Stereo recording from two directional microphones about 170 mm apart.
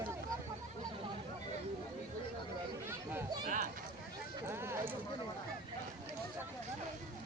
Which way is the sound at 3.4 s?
50° right (ahead or behind).